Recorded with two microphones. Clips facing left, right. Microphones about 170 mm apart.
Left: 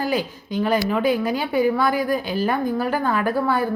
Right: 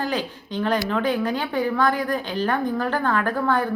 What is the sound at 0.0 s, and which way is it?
A woman's voice, 10° left (ahead or behind).